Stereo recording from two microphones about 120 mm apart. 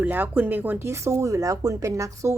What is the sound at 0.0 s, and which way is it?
A woman's voice, 15° right (ahead or behind).